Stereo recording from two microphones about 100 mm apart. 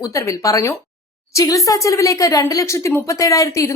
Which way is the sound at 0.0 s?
35° left (ahead or behind).